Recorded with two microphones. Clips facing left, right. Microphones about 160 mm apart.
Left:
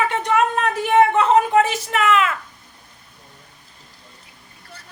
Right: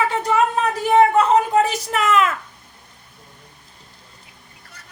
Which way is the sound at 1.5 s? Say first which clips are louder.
Left 1 dB; 40° right (ahead or behind).